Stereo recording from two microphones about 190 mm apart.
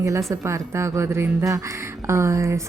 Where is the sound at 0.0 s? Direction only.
15° right (ahead or behind).